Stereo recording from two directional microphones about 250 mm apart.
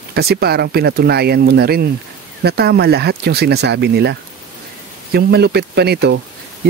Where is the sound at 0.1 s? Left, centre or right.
Right.